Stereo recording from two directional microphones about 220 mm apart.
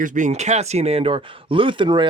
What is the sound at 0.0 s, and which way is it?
Speech, 35° right (ahead or behind).